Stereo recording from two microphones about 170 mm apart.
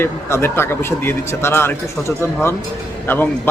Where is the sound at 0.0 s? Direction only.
15° left (ahead or behind).